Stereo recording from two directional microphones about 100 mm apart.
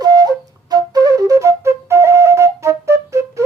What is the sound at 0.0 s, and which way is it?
Flute, 40° right (ahead or behind).